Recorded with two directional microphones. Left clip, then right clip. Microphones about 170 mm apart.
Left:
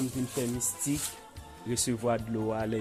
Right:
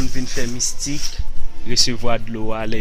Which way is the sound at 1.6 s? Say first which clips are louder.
Right 11 dB; 5° left (ahead or behind).